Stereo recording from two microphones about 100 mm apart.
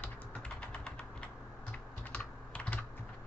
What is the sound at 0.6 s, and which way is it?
Typing, 10° left (ahead or behind).